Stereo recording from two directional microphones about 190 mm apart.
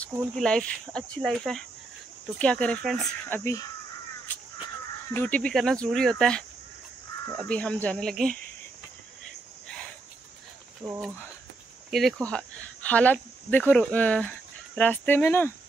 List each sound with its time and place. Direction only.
0.4 s speech: 5° left (ahead or behind)
5.1 s speech: 10° left (ahead or behind)
10.8 s speech: 15° right (ahead or behind)
11.9 s speech: centre (ahead or behind)